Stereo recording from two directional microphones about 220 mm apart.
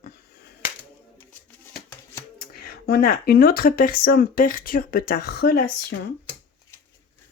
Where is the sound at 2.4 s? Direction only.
45° left (ahead or behind).